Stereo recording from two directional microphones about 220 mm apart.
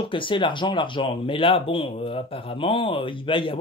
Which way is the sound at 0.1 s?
20° left (ahead or behind).